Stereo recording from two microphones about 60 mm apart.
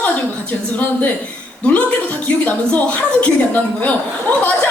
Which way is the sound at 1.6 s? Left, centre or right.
Left.